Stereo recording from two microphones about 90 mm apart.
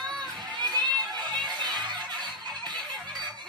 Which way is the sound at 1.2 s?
50° right (ahead or behind).